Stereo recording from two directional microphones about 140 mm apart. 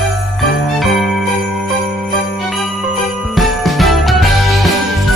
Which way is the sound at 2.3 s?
Centre (ahead or behind).